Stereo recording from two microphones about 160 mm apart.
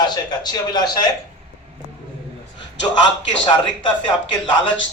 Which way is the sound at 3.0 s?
30° left (ahead or behind).